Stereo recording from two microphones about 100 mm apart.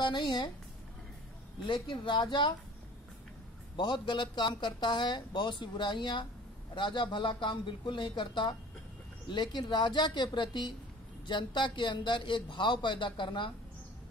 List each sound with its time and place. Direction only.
0.0 s speech: 50° left (ahead or behind)
1.7 s speech: 55° left (ahead or behind)
3.7 s speech: 50° left (ahead or behind)